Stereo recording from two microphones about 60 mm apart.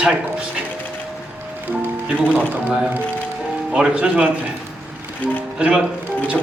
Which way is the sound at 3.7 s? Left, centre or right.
Centre.